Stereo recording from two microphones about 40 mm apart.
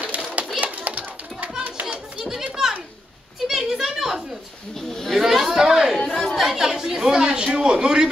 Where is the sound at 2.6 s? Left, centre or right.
Centre.